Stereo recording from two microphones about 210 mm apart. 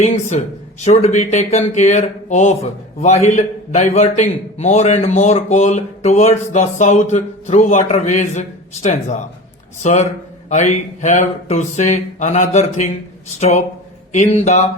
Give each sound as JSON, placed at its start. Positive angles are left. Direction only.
{"t": 0.0, "sound": "a man's voice", "side_deg": 30}